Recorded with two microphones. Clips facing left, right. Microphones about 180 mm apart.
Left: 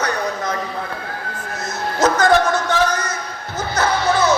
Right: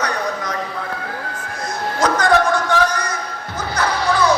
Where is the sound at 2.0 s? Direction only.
25° left (ahead or behind).